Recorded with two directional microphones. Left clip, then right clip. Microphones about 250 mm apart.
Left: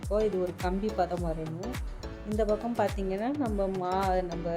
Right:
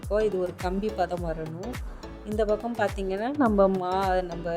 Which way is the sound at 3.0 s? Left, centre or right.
Right.